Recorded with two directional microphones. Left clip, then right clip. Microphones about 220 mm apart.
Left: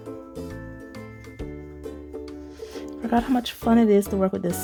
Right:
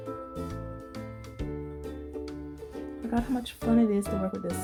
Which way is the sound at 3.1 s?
45° left (ahead or behind).